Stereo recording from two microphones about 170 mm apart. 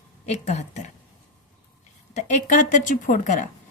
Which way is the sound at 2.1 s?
45° left (ahead or behind).